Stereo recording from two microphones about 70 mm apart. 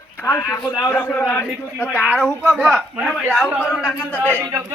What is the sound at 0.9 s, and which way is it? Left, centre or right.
Speech, left.